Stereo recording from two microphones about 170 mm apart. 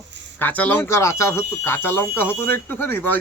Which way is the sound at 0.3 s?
10° left (ahead or behind).